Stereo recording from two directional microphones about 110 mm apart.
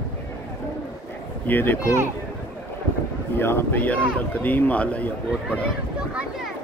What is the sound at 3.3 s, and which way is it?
Speech, 20° left (ahead or behind).